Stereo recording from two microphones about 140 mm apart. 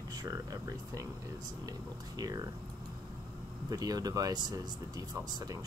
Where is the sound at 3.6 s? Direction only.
25° right (ahead or behind).